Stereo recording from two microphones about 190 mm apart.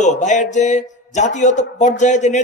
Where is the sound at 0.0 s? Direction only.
40° left (ahead or behind).